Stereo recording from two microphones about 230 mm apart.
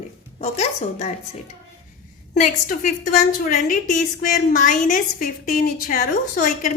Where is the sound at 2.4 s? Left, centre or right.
Left.